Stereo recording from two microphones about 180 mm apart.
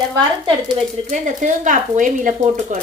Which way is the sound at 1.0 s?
45° right (ahead or behind).